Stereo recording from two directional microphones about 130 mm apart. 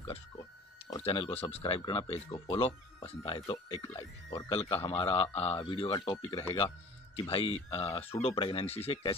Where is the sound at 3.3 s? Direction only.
35° left (ahead or behind).